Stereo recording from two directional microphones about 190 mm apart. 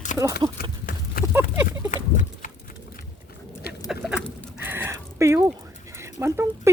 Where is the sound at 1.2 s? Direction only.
50° left (ahead or behind).